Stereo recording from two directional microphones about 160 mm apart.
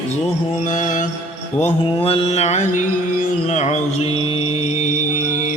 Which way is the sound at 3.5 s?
45° left (ahead or behind).